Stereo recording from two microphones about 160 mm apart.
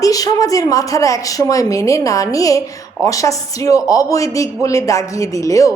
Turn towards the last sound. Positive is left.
turn(degrees=20)  # may be behind; listen again after turning